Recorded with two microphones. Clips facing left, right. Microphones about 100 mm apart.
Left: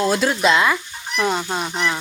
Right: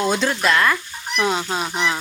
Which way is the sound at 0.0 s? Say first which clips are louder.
Left 1 dB; 5° left (ahead or behind).